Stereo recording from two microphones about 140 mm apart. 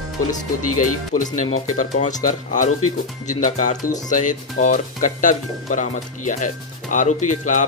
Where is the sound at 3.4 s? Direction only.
65° left (ahead or behind).